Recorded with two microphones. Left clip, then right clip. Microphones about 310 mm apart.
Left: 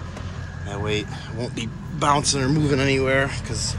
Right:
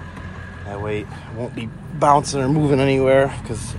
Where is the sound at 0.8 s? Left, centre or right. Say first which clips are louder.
Left 1 dB; centre.